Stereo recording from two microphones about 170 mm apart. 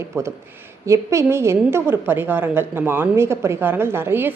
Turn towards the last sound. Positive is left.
turn(degrees=-10)  # may be behind; listen again after turning